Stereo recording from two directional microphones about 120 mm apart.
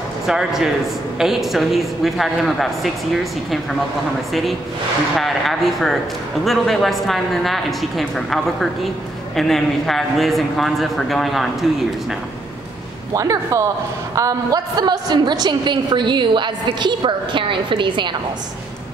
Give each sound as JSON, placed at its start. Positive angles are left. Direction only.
{"t": 0.3, "sound": "a woman's voice", "side_deg": -5}
{"t": 4.3, "sound": "a woman's voice", "side_deg": 0}
{"t": 13.1, "sound": "a woman's voice", "side_deg": -25}